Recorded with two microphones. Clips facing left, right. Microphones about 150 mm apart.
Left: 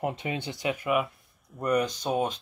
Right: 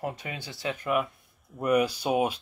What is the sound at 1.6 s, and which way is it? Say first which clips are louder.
Speech: right 2 dB; 10° right (ahead or behind).